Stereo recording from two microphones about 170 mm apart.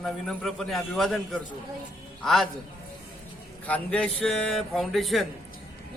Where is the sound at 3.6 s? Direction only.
10° left (ahead or behind).